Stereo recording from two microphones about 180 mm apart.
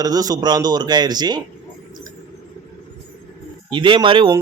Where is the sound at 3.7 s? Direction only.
25° right (ahead or behind).